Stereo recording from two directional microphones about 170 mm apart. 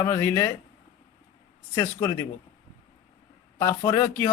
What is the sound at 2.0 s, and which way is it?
Speech, 20° left (ahead or behind).